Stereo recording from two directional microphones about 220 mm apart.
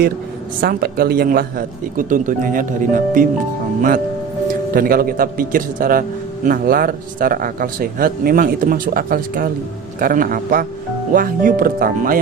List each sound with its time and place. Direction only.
0.6 s a man's voice: 45° right (ahead or behind)